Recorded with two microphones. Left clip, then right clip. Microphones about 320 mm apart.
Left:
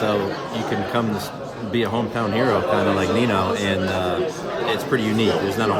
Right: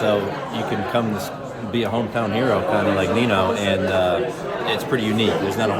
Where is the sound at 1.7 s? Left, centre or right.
Centre.